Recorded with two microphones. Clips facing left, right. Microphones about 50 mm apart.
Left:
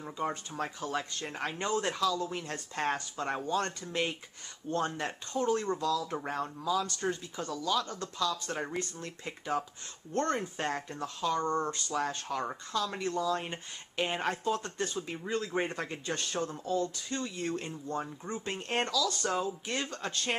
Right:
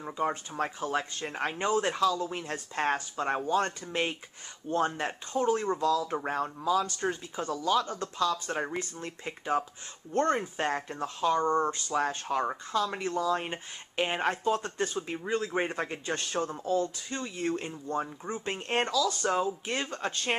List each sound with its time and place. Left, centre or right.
0.0 s speech: centre